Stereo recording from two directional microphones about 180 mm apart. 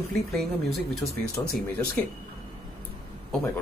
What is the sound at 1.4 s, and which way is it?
Speech, 10° left (ahead or behind).